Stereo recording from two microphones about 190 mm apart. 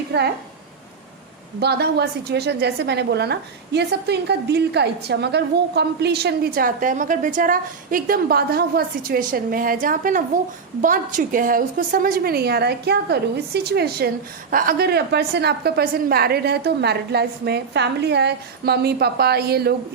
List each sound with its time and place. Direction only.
0.1 s a woman's voice: 60° right (ahead or behind)
1.5 s a woman's voice: 60° right (ahead or behind)